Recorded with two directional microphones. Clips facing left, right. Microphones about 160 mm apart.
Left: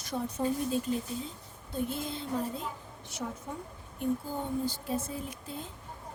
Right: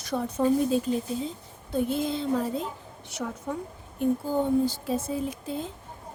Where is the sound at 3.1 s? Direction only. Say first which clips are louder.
Right 6 dB; 75° right (ahead or behind).